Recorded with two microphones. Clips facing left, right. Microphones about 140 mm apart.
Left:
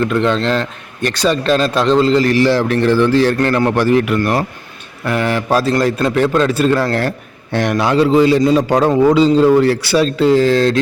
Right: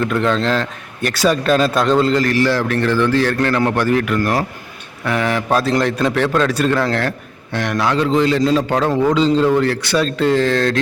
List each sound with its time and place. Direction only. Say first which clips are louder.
0.0 s a man's voice: left 2 dB; centre (ahead or behind)
2.2 s a man's voice: left 3 dB; 15° left (ahead or behind)
4.2 s a man's voice: left 2 dB; centre (ahead or behind)